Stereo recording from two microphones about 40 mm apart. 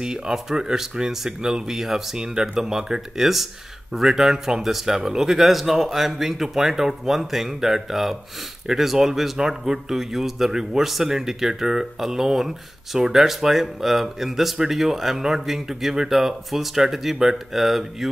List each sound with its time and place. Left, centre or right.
0.0 s a man's voice: centre
2.2 s a man's voice: centre